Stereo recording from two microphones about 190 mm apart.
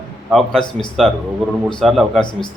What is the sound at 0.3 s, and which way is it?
Speech, centre (ahead or behind).